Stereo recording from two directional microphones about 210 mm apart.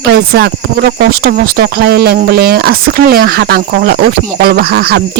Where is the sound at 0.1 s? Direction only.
50° right (ahead or behind).